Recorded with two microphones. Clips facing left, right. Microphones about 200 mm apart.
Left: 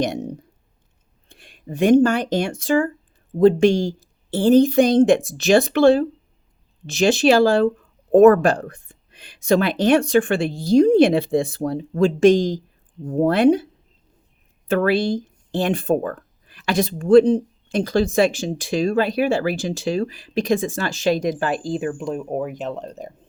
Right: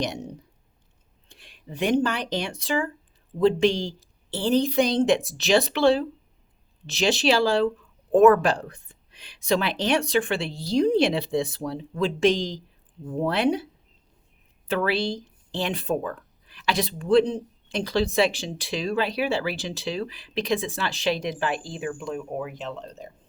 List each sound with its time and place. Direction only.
0.0 s speech: 50° left (ahead or behind)
14.7 s speech: 50° left (ahead or behind)